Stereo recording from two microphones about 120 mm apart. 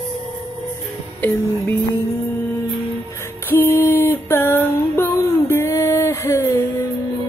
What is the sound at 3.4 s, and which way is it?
Music, 20° left (ahead or behind).